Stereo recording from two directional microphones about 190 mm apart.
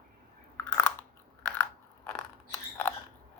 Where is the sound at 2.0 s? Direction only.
10° left (ahead or behind).